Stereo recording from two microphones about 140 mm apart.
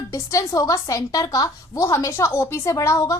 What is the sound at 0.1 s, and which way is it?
A woman's voice, 25° left (ahead or behind).